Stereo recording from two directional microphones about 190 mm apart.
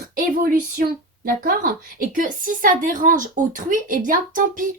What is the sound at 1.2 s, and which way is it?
A woman's voice, 45° right (ahead or behind).